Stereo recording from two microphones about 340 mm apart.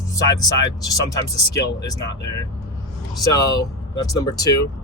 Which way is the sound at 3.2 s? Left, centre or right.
Centre.